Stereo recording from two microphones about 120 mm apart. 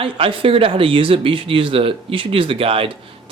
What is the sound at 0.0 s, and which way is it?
Speech, 50° right (ahead or behind).